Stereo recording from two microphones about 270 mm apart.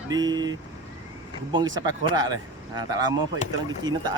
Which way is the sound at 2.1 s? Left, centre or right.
Centre.